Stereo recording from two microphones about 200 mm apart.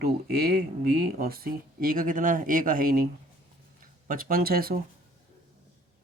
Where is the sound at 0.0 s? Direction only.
50° right (ahead or behind).